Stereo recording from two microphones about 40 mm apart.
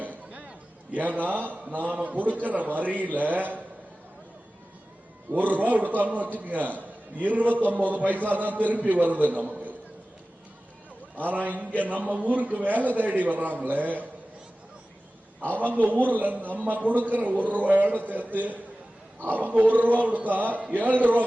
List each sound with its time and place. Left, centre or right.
0.0 s a sound: right
0.9 s a man's voice: right
5.3 s a man's voice: right
11.2 s a man's voice: right
15.5 s a man's voice: right